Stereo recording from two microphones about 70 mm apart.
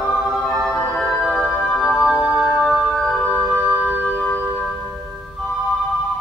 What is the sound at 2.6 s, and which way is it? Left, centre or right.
Music, centre.